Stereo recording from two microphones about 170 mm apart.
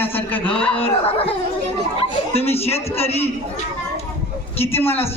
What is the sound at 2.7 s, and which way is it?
Speech, 35° left (ahead or behind).